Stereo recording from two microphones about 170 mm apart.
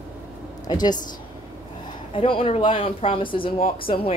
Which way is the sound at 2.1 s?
30° left (ahead or behind).